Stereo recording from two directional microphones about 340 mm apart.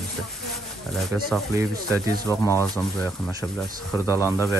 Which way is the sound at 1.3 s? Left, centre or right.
Centre.